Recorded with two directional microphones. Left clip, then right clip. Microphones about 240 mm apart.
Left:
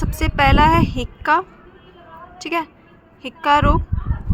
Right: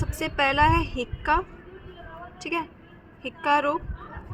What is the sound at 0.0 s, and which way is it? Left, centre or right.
A woman's voice, left.